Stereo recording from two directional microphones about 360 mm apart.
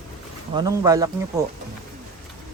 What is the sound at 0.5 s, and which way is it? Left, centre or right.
Speech, centre.